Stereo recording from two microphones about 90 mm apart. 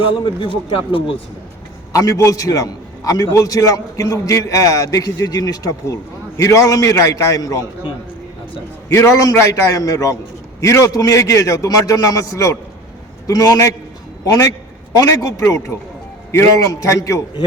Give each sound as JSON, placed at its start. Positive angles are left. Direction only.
{"t": 0.0, "sound": "a man's voice", "side_deg": 70}
{"t": 1.9, "sound": "a man's voice", "side_deg": 40}
{"t": 8.9, "sound": "a man's voice", "side_deg": 35}